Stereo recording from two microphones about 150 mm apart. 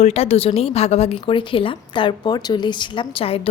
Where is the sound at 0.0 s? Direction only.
45° left (ahead or behind).